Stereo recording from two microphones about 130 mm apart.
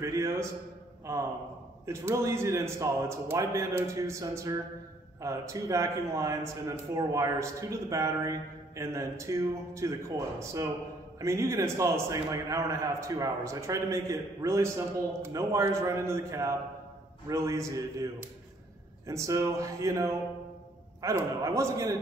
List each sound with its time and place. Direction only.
0.0 s a man's voice: 20° right (ahead or behind)